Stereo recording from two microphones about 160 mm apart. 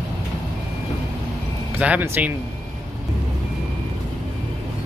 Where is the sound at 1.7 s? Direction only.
10° right (ahead or behind).